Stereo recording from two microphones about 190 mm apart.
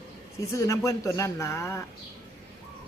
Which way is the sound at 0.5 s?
15° left (ahead or behind).